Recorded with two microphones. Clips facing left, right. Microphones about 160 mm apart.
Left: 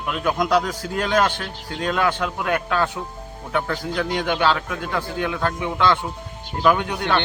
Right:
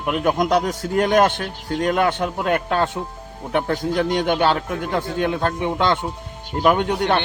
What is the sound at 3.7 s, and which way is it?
Speech, 35° right (ahead or behind).